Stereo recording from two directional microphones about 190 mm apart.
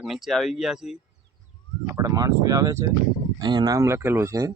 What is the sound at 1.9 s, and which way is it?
Speech, 20° right (ahead or behind).